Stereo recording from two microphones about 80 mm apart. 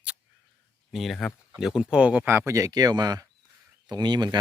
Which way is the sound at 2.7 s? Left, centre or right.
Right.